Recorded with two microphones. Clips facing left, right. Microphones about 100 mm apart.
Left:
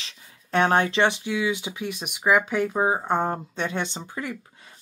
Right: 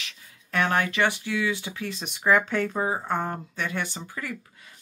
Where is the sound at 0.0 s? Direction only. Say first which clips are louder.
Right 1 dB; 30° left (ahead or behind).